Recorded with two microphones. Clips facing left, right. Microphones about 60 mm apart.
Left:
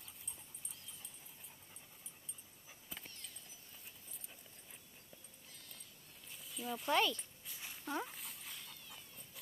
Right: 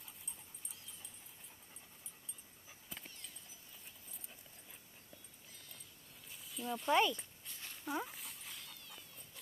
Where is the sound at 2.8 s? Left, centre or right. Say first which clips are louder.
Even; centre.